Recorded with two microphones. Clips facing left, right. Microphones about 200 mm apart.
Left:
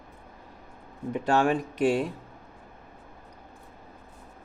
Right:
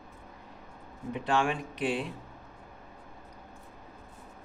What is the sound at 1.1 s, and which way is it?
Speech, 45° left (ahead or behind).